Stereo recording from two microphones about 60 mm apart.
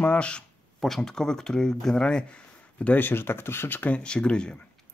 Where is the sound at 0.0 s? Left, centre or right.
Centre.